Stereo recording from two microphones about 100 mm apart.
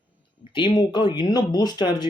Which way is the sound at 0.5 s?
50° left (ahead or behind).